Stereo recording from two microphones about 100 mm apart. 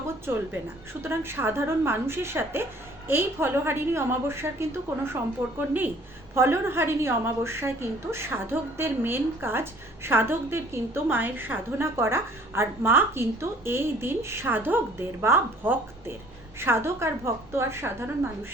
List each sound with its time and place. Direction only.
0.3 s a woman's voice: 20° right (ahead or behind)